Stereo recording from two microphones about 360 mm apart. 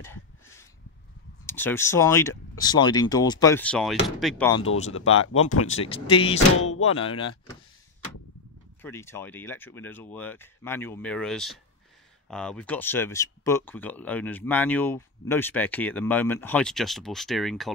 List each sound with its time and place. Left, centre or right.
0.0 s a sound: centre
1.4 s speech: centre
4.9 s speech: left
5.9 s speech: centre
8.8 s speech: centre